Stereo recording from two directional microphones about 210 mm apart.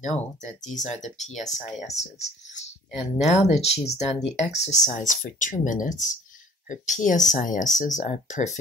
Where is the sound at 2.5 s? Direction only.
30° left (ahead or behind).